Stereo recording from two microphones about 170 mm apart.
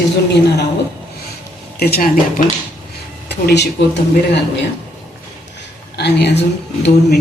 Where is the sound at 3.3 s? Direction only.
80° left.